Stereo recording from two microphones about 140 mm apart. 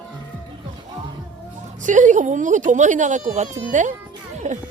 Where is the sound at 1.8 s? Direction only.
65° right (ahead or behind).